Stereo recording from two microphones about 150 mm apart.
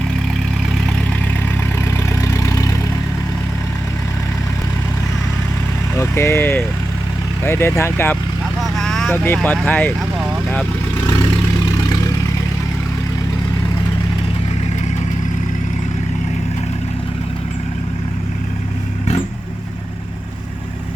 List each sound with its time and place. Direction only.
2.2 s vehicle: 20° left (ahead or behind)
6.0 s vehicle: 15° left (ahead or behind)
7.4 s speech: 15° left (ahead or behind)
8.6 s vehicle: 5° left (ahead or behind)
9.1 s speech: 15° left (ahead or behind)